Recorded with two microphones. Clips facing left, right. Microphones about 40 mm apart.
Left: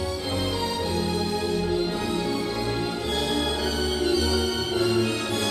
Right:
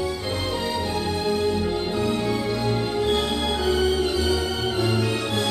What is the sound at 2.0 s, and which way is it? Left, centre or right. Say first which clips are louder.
Music: right 3 dB; right.